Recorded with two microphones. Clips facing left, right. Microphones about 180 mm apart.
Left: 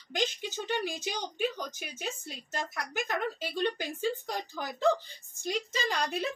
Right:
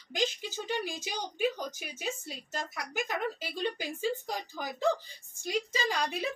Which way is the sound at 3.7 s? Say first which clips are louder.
Left 1 dB; 5° right (ahead or behind).